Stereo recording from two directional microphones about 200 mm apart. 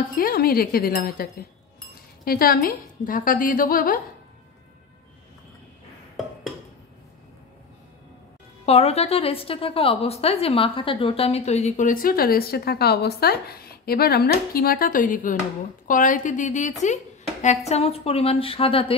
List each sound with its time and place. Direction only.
0.1 s a woman's voice: 45° left (ahead or behind)
8.6 s a woman's voice: 30° left (ahead or behind)